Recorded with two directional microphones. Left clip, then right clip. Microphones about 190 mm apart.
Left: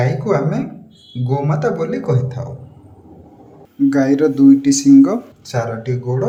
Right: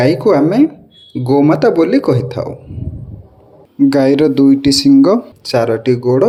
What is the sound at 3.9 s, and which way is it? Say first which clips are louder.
Speech: right 4 dB; 30° right (ahead or behind).